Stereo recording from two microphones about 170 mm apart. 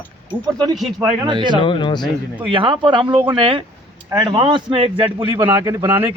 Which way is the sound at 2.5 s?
30° right (ahead or behind).